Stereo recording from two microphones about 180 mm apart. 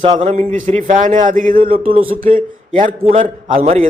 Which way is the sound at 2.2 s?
50° right (ahead or behind).